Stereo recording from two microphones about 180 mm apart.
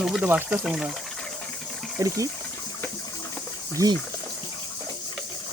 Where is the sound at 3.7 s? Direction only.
20° right (ahead or behind).